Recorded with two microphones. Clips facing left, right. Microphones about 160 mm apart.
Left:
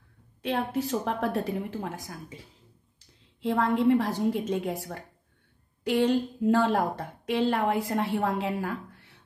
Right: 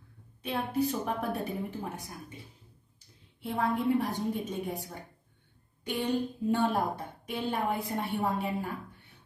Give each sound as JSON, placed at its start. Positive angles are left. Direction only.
{"t": 0.4, "sound": "a woman's voice", "side_deg": 90}